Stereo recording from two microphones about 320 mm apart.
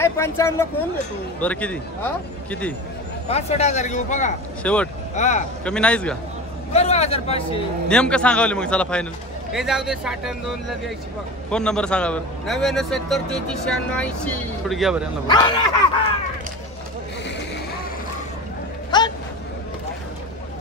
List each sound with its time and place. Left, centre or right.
0.0 s a man's voice: centre
3.3 s speech: centre
4.6 s a man's voice: centre
5.1 s speech: left
5.7 s a man's voice: centre
6.7 s speech: centre
7.9 s a man's voice: centre
11.5 s a man's voice: centre
15.2 s speech: centre
18.9 s a sound: centre